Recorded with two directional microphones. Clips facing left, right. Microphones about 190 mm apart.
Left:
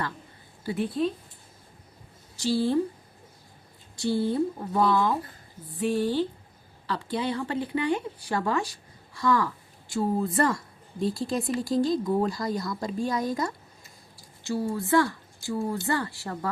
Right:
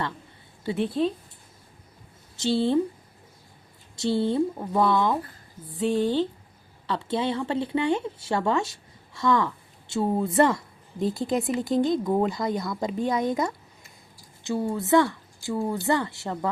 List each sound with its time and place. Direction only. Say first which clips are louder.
0.6 s speech: right 2 dB; 25° right (ahead or behind)
2.3 s a woman's voice: right 2 dB; 25° right (ahead or behind)
3.9 s a woman's voice: right 2 dB; 25° right (ahead or behind)